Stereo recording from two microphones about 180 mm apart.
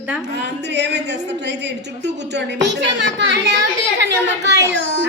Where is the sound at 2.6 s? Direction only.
75° right (ahead or behind).